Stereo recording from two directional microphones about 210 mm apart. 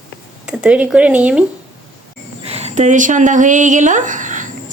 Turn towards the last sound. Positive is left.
turn(degrees=-35)  # may be behind; listen again after turning